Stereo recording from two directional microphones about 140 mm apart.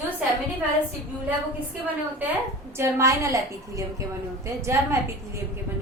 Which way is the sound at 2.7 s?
20° right (ahead or behind).